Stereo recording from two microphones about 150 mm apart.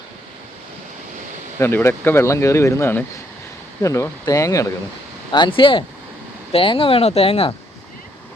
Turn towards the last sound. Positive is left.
turn(degrees=40)  # may be behind; listen again after turning